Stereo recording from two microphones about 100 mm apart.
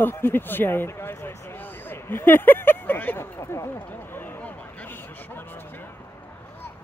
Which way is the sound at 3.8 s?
15° left (ahead or behind).